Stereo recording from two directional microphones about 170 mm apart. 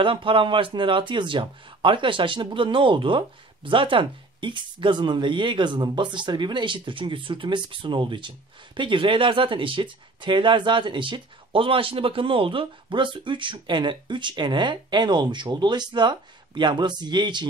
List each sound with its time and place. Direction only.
0.0 s a man's voice: 30° right (ahead or behind)